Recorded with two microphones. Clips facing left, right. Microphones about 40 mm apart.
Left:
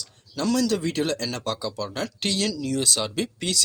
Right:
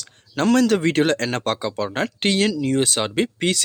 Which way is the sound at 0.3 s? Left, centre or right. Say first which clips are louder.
Right 6 dB; right.